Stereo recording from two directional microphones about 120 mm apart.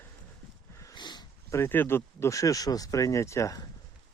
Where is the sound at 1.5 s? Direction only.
20° left (ahead or behind).